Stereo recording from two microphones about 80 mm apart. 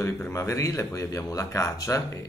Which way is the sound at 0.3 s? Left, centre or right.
Left.